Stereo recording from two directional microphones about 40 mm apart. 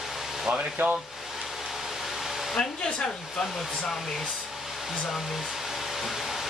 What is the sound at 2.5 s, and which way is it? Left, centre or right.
Hair dryer, left.